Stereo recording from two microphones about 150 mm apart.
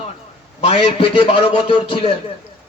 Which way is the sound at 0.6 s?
40° left (ahead or behind).